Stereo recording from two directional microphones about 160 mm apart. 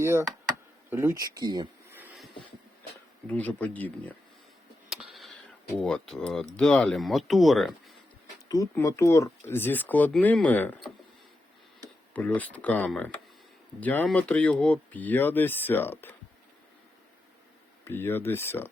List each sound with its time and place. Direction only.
0.0 s speech: 20° right (ahead or behind)
1.9 s a sound: 10° right (ahead or behind)
3.2 s speech: 10° left (ahead or behind)
4.9 s a sound: 5° right (ahead or behind)
5.8 s speech: 5° left (ahead or behind)
8.4 s speech: 20° left (ahead or behind)
12.1 s speech: 10° left (ahead or behind)
17.8 s speech: 15° left (ahead or behind)